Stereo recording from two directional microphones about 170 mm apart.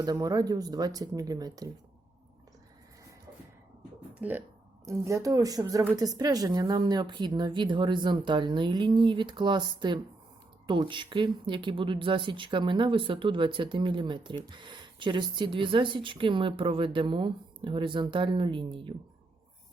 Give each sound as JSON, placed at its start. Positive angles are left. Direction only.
{"t": 0.0, "sound": "speech", "side_deg": -20}
{"t": 4.1, "sound": "speech", "side_deg": -10}